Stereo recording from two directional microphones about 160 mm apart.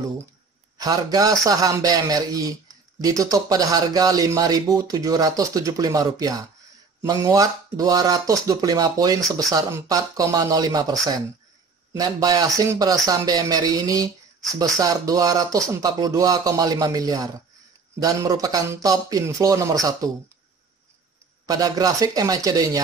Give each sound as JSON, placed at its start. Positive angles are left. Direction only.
{"t": 0.7, "sound": "speech", "side_deg": -25}
{"t": 21.5, "sound": "speech", "side_deg": -20}